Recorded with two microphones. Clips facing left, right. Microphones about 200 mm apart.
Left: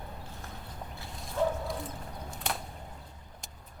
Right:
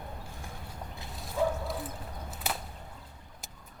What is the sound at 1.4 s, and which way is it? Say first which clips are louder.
Bow-wow: even; 10° right (ahead or behind).